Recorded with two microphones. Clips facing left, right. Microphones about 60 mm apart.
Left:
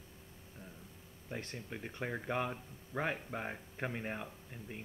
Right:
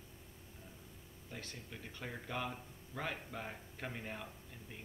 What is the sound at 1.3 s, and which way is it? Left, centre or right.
Speech, left.